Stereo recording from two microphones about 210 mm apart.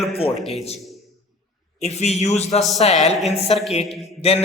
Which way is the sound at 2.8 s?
30° left (ahead or behind).